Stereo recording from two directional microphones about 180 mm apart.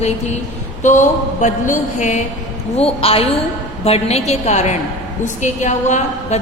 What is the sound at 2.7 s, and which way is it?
A woman's voice, 35° left (ahead or behind).